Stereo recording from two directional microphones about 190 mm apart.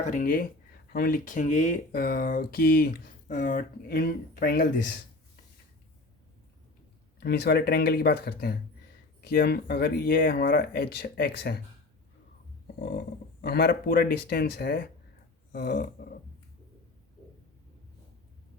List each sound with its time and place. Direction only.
0.0 s speech: 45° left (ahead or behind)
7.2 s speech: 60° left (ahead or behind)
13.4 s speech: 55° left (ahead or behind)